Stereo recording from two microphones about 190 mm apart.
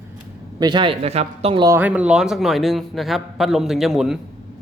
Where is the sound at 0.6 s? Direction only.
25° right (ahead or behind).